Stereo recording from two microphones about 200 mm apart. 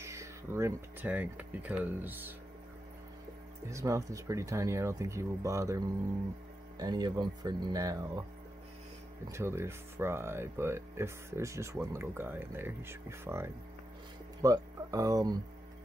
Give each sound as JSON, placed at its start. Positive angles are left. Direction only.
{"t": 0.0, "sound": "speech", "side_deg": -15}
{"t": 3.7, "sound": "speech", "side_deg": -15}
{"t": 9.3, "sound": "speech", "side_deg": -15}